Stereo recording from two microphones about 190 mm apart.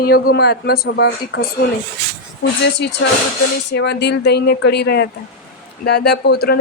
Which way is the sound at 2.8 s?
60° left (ahead or behind).